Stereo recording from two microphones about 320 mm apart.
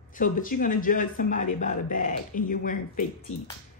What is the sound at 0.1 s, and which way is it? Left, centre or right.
A woman's voice, left.